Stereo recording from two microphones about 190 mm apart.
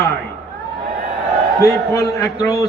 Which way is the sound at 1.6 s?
15° left (ahead or behind).